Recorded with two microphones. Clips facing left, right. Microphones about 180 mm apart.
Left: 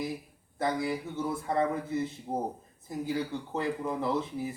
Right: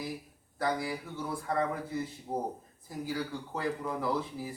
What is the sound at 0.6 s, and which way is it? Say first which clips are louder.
Speech: left 2 dB; 25° left (ahead or behind).